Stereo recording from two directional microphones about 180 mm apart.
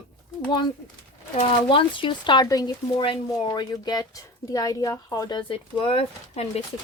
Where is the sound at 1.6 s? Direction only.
25° left (ahead or behind).